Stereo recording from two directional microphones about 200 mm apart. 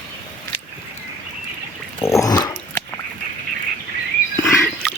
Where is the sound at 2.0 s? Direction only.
15° left (ahead or behind).